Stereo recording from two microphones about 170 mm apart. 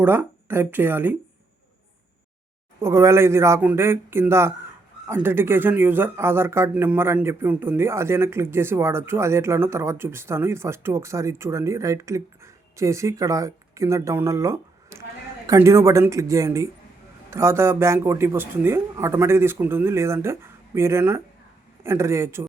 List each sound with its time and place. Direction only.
0.0 s speech: 15° right (ahead or behind)
2.8 s speech: 15° right (ahead or behind)